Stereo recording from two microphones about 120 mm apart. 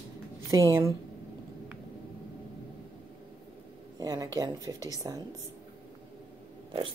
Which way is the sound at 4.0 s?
30° right (ahead or behind).